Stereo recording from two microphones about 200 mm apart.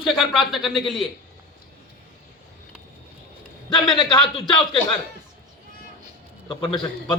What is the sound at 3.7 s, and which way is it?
Speech, 20° left (ahead or behind).